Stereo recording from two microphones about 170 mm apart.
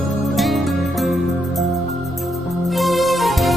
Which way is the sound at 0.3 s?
Centre (ahead or behind).